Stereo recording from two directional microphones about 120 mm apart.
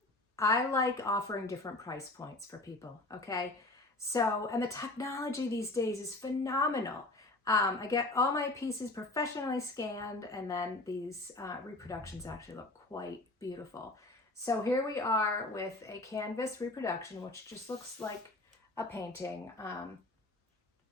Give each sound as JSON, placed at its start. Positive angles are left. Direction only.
{"t": 0.3, "sound": "a woman's voice", "side_deg": 25}
{"t": 18.0, "sound": "speech", "side_deg": 10}
{"t": 18.8, "sound": "a woman's voice", "side_deg": 20}